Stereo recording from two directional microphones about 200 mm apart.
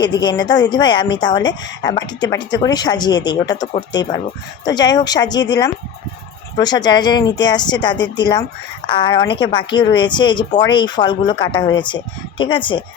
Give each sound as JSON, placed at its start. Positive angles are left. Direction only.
{"t": 0.0, "sound": "a woman's voice", "side_deg": 20}